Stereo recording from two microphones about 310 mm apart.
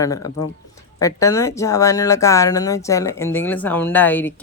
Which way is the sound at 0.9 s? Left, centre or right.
Centre.